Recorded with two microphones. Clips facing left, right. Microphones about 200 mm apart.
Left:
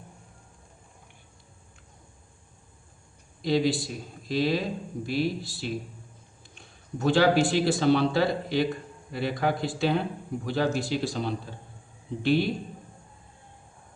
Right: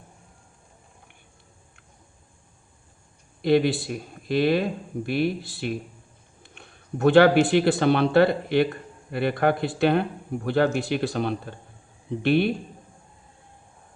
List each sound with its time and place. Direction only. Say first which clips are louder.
3.4 s speech: right 4 dB; 60° right (ahead or behind)